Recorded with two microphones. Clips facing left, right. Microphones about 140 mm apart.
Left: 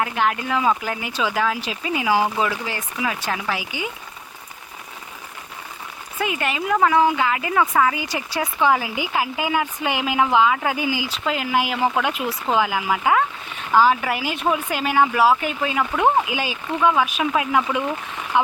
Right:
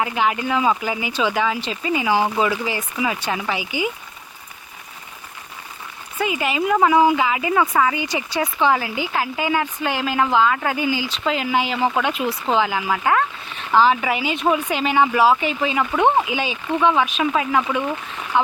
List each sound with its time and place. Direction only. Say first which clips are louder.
0.0 s speech: right 1 dB; centre (ahead or behind)
6.1 s speech: right 3 dB; centre (ahead or behind)